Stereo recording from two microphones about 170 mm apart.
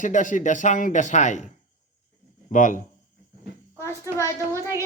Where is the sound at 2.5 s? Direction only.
50° left (ahead or behind).